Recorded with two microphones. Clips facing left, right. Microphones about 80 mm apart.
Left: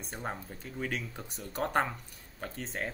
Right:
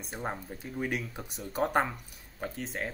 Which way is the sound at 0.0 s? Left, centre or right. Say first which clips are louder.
Right 2 dB; centre.